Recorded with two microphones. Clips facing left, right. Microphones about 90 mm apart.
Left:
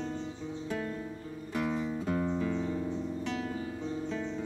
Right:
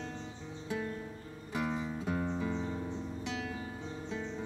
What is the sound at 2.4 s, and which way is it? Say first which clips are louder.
Keyboard: left 4 dB; 15° right (ahead or behind).